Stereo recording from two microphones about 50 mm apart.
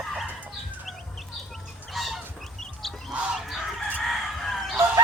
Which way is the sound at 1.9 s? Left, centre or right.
Centre.